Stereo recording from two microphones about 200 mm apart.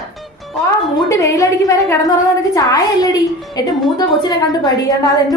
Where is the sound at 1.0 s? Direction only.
15° left (ahead or behind).